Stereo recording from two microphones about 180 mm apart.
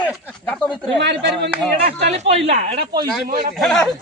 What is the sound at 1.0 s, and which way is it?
Speech, 70° right (ahead or behind).